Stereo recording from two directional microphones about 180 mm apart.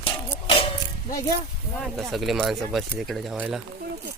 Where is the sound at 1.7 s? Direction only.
Centre (ahead or behind).